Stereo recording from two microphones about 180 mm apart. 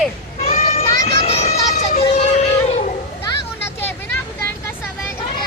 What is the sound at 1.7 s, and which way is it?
Emergency vehicle, 45° left (ahead or behind).